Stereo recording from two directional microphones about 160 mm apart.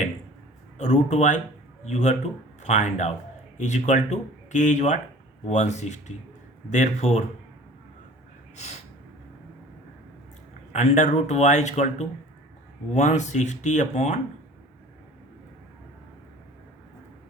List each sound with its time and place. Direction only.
0.8 s a man's voice: 45° left (ahead or behind)
10.7 s a man's voice: 45° left (ahead or behind)